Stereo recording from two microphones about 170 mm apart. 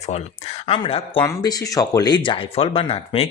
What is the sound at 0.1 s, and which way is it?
Speech, 35° left (ahead or behind).